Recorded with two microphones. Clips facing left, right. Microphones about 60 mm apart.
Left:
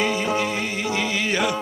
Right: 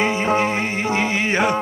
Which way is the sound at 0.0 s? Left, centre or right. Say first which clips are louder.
Right 4 dB; right.